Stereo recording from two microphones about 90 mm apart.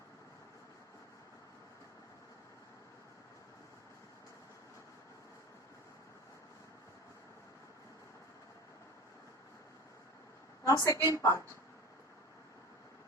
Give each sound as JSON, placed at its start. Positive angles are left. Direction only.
{"t": 10.6, "sound": "a woman's voice", "side_deg": 35}